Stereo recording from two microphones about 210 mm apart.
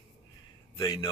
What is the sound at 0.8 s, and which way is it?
Speech, 20° left (ahead or behind).